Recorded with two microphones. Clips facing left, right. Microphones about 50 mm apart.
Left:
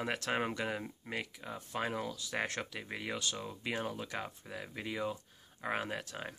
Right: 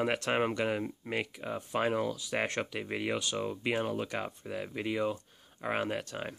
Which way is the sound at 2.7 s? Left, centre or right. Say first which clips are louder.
Right 6 dB; right.